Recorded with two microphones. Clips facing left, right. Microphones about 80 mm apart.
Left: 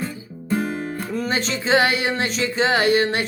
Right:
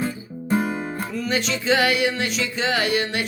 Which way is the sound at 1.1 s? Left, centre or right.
Left.